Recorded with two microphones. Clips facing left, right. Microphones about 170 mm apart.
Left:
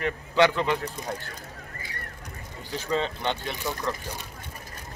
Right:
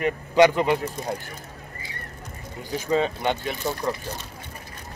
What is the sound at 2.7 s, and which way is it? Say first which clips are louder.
Speech: right 5 dB; 10° right (ahead or behind).